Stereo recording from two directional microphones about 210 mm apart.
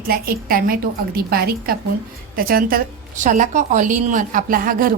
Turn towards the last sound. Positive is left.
turn(degrees=-40)  # may be behind; listen again after turning